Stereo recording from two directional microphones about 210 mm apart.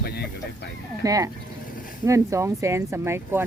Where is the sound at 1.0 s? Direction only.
15° right (ahead or behind).